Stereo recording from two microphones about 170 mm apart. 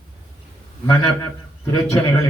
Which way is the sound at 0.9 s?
20° left (ahead or behind).